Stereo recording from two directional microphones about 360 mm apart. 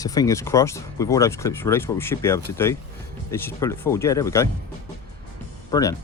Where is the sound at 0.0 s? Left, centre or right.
Centre.